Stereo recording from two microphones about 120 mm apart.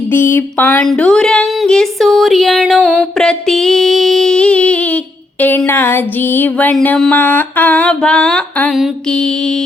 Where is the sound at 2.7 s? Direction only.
10° right (ahead or behind).